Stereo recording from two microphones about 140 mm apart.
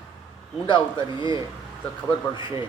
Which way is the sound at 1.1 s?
35° left (ahead or behind).